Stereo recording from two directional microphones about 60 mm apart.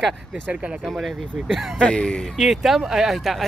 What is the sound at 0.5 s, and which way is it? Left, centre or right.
Speech, centre.